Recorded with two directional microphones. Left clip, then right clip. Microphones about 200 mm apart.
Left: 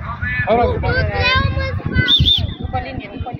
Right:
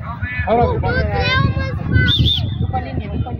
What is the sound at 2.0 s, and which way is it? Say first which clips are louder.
Bird: left 5 dB; 40° right (ahead or behind).